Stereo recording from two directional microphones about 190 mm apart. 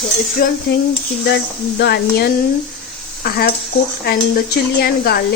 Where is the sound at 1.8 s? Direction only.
60° left (ahead or behind).